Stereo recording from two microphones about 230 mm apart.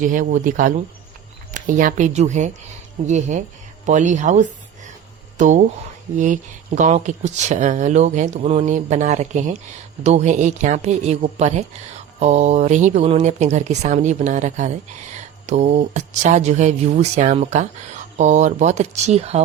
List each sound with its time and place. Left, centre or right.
0.0 s speech: right